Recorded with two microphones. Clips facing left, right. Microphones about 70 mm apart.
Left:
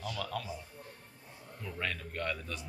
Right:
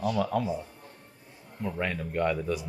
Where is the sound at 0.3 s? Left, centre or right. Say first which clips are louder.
Right 11 dB; right.